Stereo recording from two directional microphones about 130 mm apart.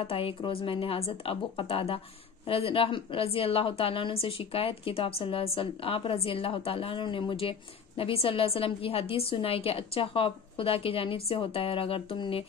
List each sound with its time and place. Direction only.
0.0 s a woman's voice: 45° left (ahead or behind)